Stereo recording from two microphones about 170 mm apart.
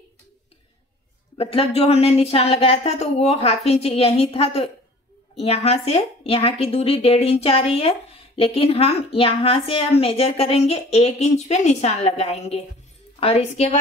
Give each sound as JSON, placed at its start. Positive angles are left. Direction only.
{"t": 1.4, "sound": "speech", "side_deg": 35}